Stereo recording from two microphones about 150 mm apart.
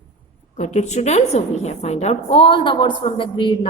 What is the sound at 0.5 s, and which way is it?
A woman's voice, 55° left (ahead or behind).